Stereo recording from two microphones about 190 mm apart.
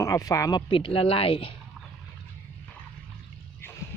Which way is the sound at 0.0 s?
15° left (ahead or behind).